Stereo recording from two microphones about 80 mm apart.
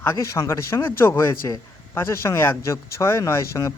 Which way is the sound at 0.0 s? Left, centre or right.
Left.